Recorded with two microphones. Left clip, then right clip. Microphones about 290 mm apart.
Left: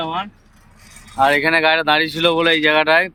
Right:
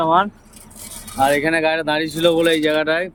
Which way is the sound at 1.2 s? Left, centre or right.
Centre.